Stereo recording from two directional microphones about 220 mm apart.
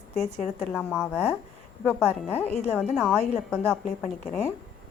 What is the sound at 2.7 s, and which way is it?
A woman's voice, centre (ahead or behind).